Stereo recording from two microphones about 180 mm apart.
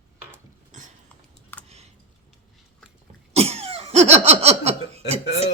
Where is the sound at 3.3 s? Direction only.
35° right (ahead or behind).